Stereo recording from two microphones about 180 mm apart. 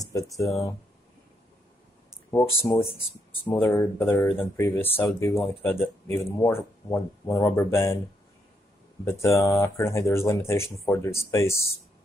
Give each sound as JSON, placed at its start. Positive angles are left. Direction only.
{"t": 0.0, "sound": "speech", "side_deg": 20}
{"t": 2.3, "sound": "speech", "side_deg": 10}
{"t": 9.0, "sound": "speech", "side_deg": 15}